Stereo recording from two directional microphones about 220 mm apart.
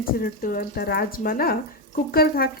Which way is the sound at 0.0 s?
40° left (ahead or behind).